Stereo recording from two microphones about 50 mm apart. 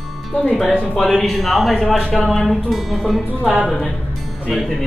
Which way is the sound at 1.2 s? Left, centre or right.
Centre.